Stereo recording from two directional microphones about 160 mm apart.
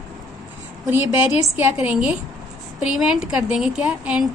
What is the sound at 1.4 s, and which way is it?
A woman's voice, 15° right (ahead or behind).